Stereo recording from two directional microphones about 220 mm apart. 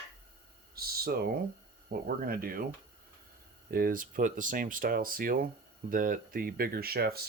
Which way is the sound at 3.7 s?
40° right (ahead or behind).